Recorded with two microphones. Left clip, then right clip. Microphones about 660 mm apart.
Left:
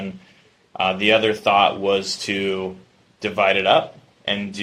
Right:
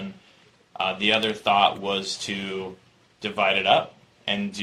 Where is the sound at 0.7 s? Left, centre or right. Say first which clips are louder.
Left 5 dB; left.